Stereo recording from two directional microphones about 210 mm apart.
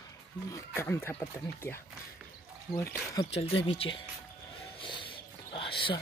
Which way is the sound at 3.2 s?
25° left (ahead or behind).